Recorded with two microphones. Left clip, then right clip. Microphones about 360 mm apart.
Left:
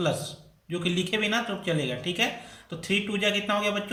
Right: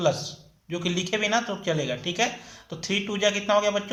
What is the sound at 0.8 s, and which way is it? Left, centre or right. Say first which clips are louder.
Speech: right 1 dB; centre.